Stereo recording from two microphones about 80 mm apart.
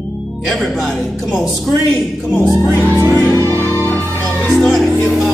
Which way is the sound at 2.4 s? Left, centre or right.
Right.